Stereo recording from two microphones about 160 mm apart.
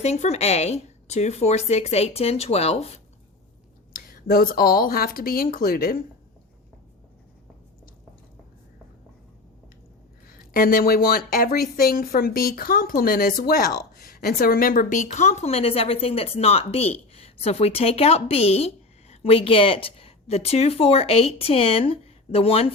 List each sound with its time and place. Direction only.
0.0 s a woman's voice: 45° left (ahead or behind)
3.9 s speech: 65° left (ahead or behind)
10.2 s a woman's voice: 65° left (ahead or behind); by 22.7 s 35° left (ahead or behind)